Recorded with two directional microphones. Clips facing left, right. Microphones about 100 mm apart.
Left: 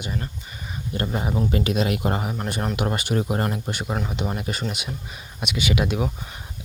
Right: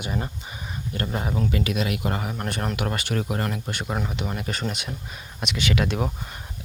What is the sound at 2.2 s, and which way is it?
A man's voice, 10° left (ahead or behind).